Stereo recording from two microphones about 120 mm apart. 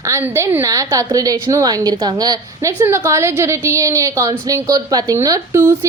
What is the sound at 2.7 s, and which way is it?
A woman's voice, 20° right (ahead or behind).